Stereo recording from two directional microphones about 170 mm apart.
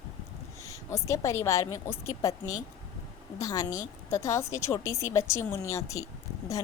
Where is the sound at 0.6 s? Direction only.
20° left (ahead or behind).